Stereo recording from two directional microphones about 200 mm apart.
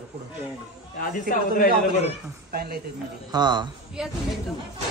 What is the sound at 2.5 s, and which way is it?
Speech, 50° right (ahead or behind).